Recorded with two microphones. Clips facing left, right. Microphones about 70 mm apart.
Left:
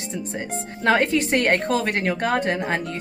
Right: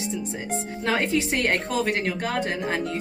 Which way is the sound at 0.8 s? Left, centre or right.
Left.